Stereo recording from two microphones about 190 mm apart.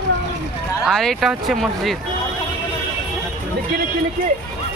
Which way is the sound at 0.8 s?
Centre (ahead or behind).